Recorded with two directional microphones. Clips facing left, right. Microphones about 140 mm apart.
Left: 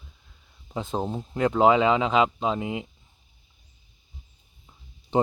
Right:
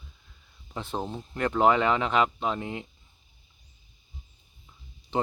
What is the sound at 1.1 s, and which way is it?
Speech, 5° left (ahead or behind).